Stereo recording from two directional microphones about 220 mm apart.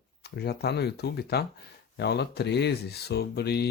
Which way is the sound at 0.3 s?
50° left (ahead or behind).